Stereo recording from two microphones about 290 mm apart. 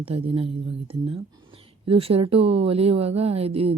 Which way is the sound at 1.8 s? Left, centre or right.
Centre.